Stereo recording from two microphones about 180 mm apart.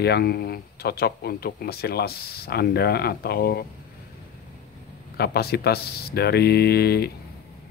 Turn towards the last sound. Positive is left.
turn(degrees=65)  # may be behind; listen again after turning